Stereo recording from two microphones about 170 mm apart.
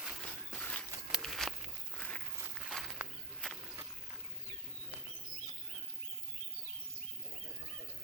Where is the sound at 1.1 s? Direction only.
Centre (ahead or behind).